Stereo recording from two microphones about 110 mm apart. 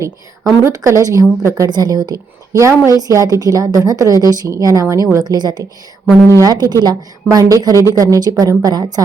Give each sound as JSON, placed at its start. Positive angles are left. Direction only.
{"t": 0.6, "sound": "a woman's voice", "side_deg": -30}